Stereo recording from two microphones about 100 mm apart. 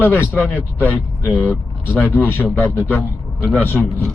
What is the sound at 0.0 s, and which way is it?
A man's voice, 20° left (ahead or behind).